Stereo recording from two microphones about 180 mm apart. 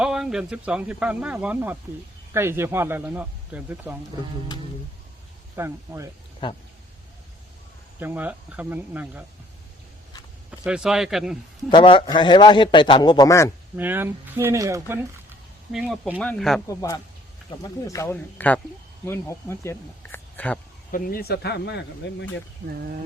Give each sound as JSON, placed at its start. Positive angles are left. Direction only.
{"t": 0.0, "sound": "a man's voice", "side_deg": -5}
{"t": 5.5, "sound": "a man's voice", "side_deg": -15}
{"t": 6.4, "sound": "a man's voice", "side_deg": 30}
{"t": 7.9, "sound": "a man's voice", "side_deg": -10}
{"t": 10.6, "sound": "speech", "side_deg": -5}
{"t": 11.7, "sound": "a man's voice", "side_deg": 25}
{"t": 13.7, "sound": "a man's voice", "side_deg": -10}
{"t": 15.7, "sound": "speech", "side_deg": -5}
{"t": 16.6, "sound": "a man's voice", "side_deg": 20}
{"t": 20.9, "sound": "speech", "side_deg": 55}